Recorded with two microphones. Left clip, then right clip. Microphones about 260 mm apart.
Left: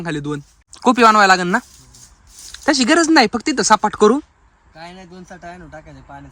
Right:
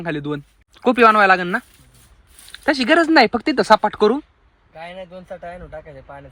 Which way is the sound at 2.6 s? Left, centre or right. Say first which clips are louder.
Left 1 dB; centre.